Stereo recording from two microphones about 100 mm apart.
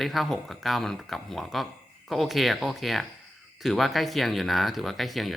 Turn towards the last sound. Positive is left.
turn(degrees=0)  # may be behind; listen again after turning